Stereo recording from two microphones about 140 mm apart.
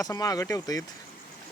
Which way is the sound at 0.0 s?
25° left (ahead or behind).